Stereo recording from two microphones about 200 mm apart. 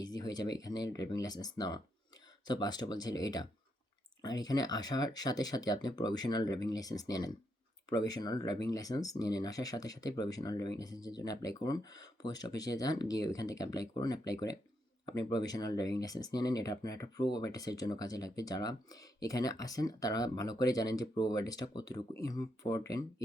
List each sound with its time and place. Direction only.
0.0 s speech: 20° left (ahead or behind)